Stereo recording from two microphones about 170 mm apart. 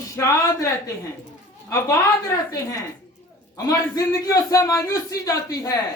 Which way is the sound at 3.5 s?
20° left (ahead or behind).